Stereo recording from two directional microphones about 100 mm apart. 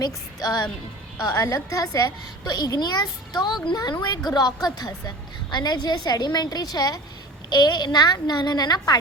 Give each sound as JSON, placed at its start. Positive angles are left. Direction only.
{"t": 0.0, "sound": "a child's voice", "side_deg": 40}